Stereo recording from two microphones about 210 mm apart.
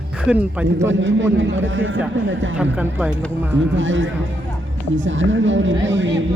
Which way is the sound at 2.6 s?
5° right (ahead or behind).